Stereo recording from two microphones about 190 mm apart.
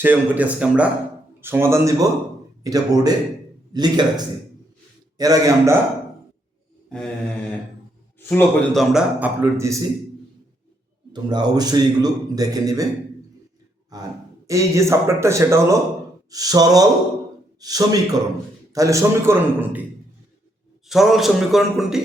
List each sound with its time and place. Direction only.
0.0 s a man's voice: 10° right (ahead or behind)
5.1 s a man's voice: 20° right (ahead or behind)
8.3 s a man's voice: 5° left (ahead or behind); by 9.8 s 15° right (ahead or behind)
11.1 s a man's voice: 20° right (ahead or behind)
13.9 s a man's voice: 20° right (ahead or behind)
20.8 s a man's voice: centre (ahead or behind)